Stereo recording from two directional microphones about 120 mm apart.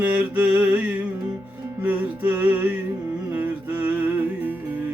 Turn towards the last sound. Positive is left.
turn(degrees=-15)  # may be behind; listen again after turning